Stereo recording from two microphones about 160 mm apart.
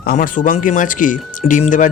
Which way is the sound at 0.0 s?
65° left (ahead or behind).